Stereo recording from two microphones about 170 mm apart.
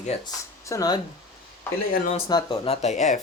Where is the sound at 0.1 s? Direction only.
40° left (ahead or behind).